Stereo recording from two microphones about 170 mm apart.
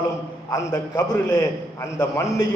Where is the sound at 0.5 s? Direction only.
20° left (ahead or behind).